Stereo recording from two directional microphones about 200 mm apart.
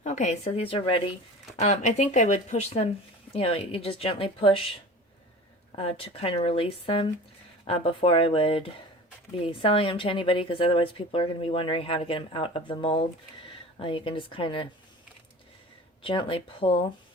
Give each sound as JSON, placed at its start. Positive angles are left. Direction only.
{"t": 0.0, "sound": "speech", "side_deg": 35}
{"t": 5.7, "sound": "speech", "side_deg": 30}
{"t": 16.0, "sound": "speech", "side_deg": 25}